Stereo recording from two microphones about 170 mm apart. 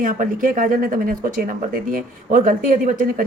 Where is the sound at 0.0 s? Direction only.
50° right (ahead or behind).